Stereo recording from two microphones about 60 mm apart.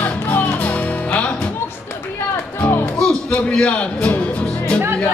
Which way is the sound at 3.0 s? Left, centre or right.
Centre.